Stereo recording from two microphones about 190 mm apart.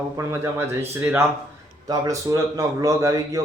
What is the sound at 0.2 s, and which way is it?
A man's voice, 15° right (ahead or behind).